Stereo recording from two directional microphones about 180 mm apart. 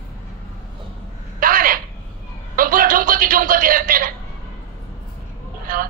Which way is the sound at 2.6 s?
50° right (ahead or behind).